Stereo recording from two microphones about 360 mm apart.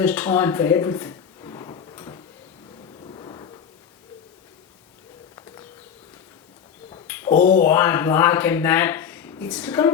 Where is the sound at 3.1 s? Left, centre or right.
Centre.